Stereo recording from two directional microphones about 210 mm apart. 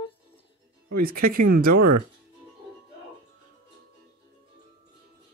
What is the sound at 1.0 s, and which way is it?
Speech, 40° right (ahead or behind).